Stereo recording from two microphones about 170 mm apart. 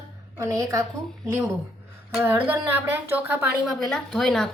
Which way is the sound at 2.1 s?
15° right (ahead or behind).